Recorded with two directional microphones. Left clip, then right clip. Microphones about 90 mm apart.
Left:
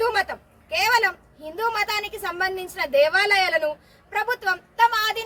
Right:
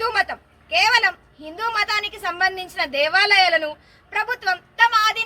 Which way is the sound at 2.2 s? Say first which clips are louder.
Right 4 dB; 45° left (ahead or behind).